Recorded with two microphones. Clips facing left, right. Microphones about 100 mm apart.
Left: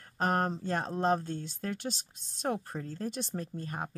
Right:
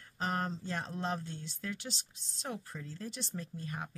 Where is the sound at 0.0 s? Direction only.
50° left (ahead or behind).